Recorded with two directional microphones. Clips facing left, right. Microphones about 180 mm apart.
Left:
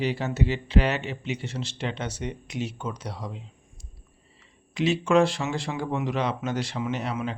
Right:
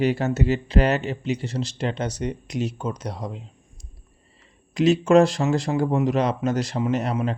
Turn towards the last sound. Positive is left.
turn(degrees=-40)  # may be behind; listen again after turning